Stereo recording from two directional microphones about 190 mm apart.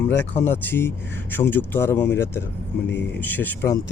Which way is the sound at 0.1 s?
15° left (ahead or behind).